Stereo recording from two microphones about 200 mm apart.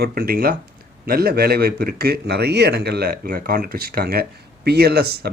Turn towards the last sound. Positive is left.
turn(degrees=-50)  # may be behind; listen again after turning